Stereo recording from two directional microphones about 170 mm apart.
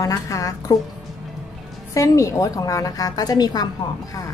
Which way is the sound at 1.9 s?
20° left (ahead or behind).